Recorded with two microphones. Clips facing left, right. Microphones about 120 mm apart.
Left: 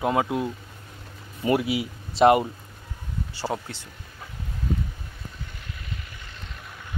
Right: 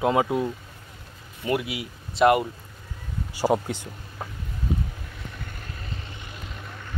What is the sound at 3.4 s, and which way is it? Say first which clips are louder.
Speech: right 8 dB; 15° right (ahead or behind).